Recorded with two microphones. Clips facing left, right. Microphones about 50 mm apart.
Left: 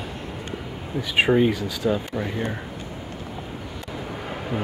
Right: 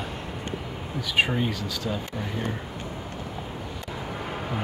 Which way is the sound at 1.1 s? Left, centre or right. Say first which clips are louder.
Left 6 dB; centre.